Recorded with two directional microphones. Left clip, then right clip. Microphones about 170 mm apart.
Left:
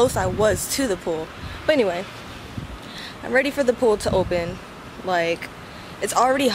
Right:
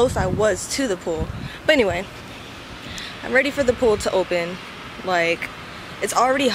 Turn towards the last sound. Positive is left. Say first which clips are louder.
# even
turn(degrees=0)  # may be behind; listen again after turning